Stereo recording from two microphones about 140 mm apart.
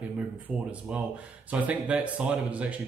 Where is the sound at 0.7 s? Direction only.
10° right (ahead or behind).